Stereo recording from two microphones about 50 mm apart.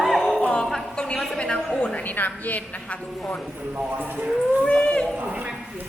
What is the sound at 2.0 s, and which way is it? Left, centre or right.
A woman's voice, left.